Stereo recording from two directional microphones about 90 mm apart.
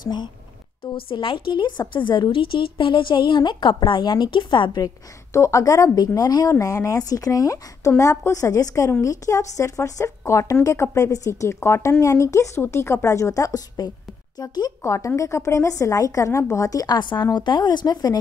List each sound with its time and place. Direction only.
0.0 s speech: 55° left (ahead or behind)
1.0 s a woman's voice: 70° left (ahead or behind); by 4.9 s 55° left (ahead or behind)
5.3 s speech: 35° left (ahead or behind)
14.8 s speech: 35° left (ahead or behind); by 18.1 s 50° left (ahead or behind)